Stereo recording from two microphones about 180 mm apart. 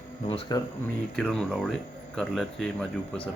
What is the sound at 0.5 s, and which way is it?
Speech, 20° left (ahead or behind).